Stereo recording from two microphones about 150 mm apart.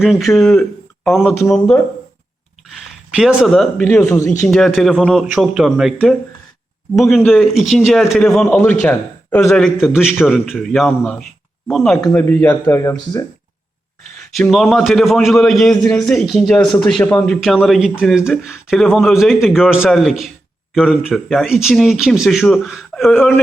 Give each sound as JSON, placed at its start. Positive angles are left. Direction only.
{"t": 0.0, "sound": "speech", "side_deg": 0}
{"t": 2.6, "sound": "a sound", "side_deg": 0}
{"t": 3.8, "sound": "speech", "side_deg": 15}
{"t": 4.3, "sound": "speech", "side_deg": 0}
{"t": 7.3, "sound": "speech", "side_deg": 0}
{"t": 12.0, "sound": "speech", "side_deg": 10}
{"t": 14.3, "sound": "speech", "side_deg": 0}